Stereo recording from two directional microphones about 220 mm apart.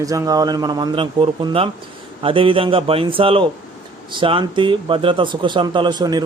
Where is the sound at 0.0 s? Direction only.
15° right (ahead or behind).